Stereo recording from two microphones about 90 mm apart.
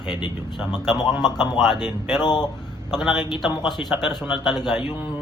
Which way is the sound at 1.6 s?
5° left (ahead or behind).